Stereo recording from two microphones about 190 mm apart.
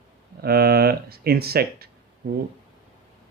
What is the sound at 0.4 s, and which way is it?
Speech, 55° right (ahead or behind).